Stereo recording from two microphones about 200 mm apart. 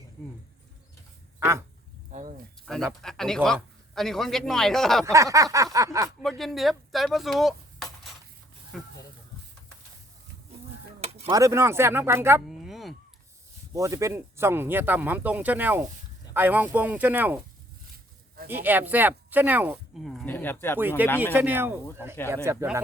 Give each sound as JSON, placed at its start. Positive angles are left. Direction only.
{"t": 1.4, "sound": "dog", "side_deg": -15}
{"t": 2.1, "sound": "snake", "side_deg": -40}
{"t": 2.7, "sound": "a man's voice", "side_deg": 5}
{"t": 5.1, "sound": "speech", "side_deg": -15}
{"t": 6.1, "sound": "a man's voice", "side_deg": 0}
{"t": 11.3, "sound": "speech", "side_deg": -15}
{"t": 12.5, "sound": "a sound", "side_deg": 0}
{"t": 13.7, "sound": "speech", "side_deg": -15}
{"t": 18.4, "sound": "speech", "side_deg": -10}
{"t": 21.0, "sound": "speech", "side_deg": -10}